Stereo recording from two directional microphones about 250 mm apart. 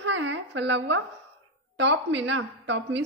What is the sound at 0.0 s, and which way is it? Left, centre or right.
A woman's voice, right.